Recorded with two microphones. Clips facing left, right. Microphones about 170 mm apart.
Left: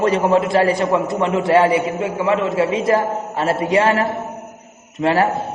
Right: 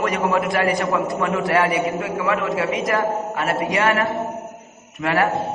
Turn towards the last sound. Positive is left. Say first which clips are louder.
# left 4 dB
turn(degrees=30)  # may be behind; listen again after turning